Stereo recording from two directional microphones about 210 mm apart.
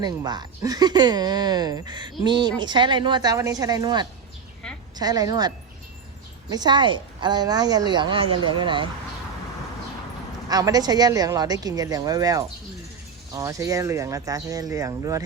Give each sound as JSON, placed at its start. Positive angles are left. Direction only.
{"t": 0.0, "sound": "speech", "side_deg": -20}
{"t": 10.5, "sound": "a woman's voice", "side_deg": -20}